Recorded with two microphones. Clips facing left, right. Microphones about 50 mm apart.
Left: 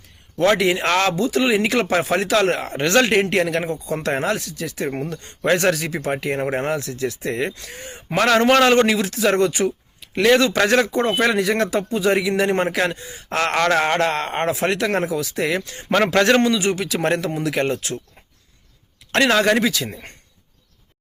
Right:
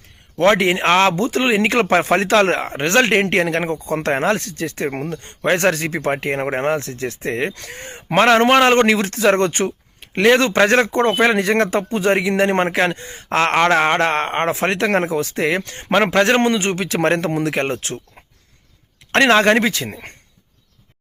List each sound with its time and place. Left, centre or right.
0.3 s speech: right
2.6 s speech: right
4.9 s speech: right
8.3 s speech: right
10.2 s speech: right
13.2 s speech: right
15.9 s a man's voice: right
16.5 s speech: right
19.1 s speech: right